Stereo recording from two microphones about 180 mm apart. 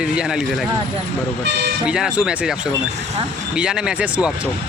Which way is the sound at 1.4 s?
75° right (ahead or behind).